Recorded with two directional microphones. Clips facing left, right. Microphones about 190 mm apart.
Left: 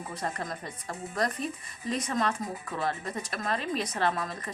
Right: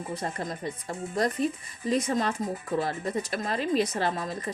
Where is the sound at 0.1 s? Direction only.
25° right (ahead or behind).